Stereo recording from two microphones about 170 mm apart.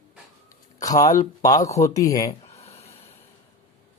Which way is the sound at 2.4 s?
40° left (ahead or behind).